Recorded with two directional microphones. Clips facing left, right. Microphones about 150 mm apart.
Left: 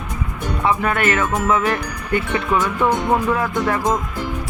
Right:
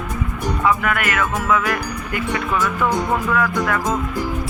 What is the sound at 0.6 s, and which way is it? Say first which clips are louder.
Speech: left 2 dB; 30° left (ahead or behind).